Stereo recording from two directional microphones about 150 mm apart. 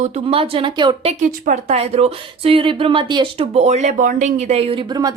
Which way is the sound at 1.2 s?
60° right (ahead or behind).